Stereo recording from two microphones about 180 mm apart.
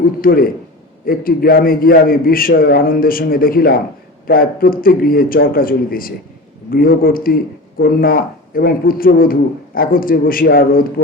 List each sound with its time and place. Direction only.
0.0 s a man's voice: 55° left (ahead or behind)